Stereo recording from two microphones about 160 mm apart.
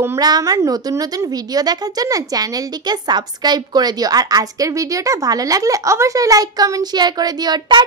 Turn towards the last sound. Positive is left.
turn(degrees=-25)  # may be behind; listen again after turning